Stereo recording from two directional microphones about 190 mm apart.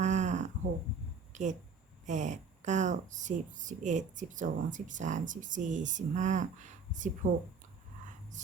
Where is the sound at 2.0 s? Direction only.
40° right (ahead or behind).